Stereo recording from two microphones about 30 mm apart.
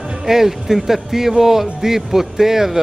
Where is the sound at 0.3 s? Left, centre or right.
Centre.